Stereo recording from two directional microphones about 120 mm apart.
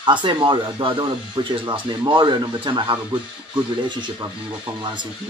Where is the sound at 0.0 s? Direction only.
40° right (ahead or behind).